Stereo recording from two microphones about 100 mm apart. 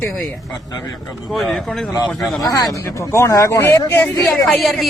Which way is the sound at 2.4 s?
40° left (ahead or behind).